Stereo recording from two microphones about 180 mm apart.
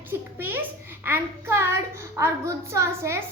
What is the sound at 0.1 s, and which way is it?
A child's voice, 10° right (ahead or behind).